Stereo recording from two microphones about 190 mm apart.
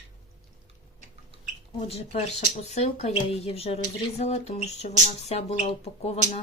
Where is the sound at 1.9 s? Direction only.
35° left (ahead or behind).